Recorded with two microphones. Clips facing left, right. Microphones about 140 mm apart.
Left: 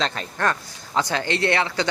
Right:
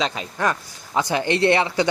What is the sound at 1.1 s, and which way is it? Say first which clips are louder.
Speech: right 6 dB; 20° right (ahead or behind).